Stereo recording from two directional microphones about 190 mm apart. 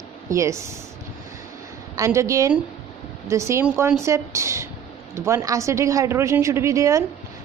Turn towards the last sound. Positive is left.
turn(degrees=-15)  # may be behind; listen again after turning